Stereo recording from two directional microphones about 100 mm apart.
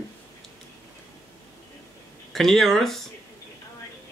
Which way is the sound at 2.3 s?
5° left (ahead or behind).